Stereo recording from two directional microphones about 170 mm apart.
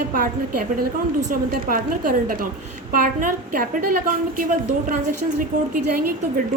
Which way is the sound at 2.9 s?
55° right (ahead or behind).